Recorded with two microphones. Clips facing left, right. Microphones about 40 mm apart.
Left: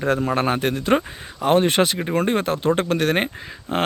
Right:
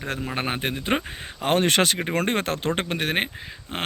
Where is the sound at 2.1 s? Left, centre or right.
Right.